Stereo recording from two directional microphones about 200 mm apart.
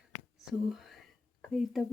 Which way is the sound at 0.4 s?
Centre (ahead or behind).